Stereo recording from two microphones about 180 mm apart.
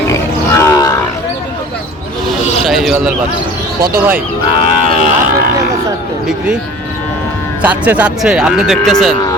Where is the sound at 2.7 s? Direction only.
Centre (ahead or behind).